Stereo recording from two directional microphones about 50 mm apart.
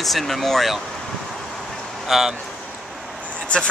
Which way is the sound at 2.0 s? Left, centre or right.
Centre.